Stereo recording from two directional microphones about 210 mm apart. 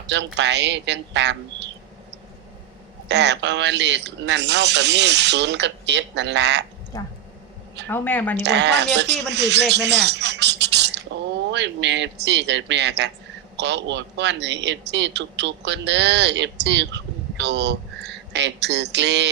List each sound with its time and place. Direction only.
0.1 s a man's voice: 55° right (ahead or behind)
3.1 s a man's voice: 55° right (ahead or behind)
6.9 s a woman's voice: 20° left (ahead or behind)
8.4 s a man's voice: 55° right (ahead or behind)